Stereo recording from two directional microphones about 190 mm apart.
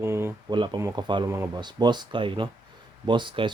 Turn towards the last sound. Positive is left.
turn(degrees=-25)  # may be behind; listen again after turning